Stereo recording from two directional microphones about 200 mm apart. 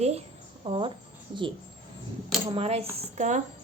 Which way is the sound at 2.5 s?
30° right (ahead or behind).